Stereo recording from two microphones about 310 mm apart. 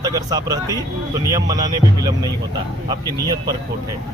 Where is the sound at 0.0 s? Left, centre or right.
Centre.